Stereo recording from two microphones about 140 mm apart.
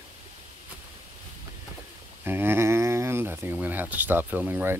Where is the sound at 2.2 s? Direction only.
15° right (ahead or behind).